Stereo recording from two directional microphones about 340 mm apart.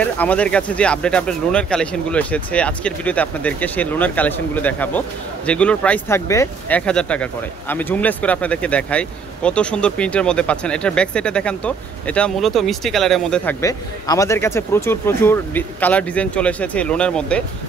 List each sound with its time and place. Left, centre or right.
0.0 s speech: centre